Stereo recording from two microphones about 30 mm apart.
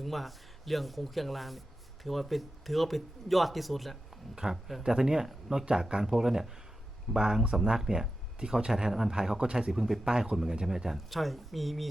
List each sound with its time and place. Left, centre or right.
0.0 s speech: centre
4.4 s speech: centre
7.9 s speech: right
8.4 s speech: right
9.7 s speech: centre
10.1 s speech: right
10.9 s speech: centre